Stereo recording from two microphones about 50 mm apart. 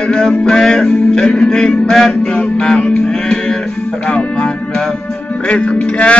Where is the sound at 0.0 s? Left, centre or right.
Centre.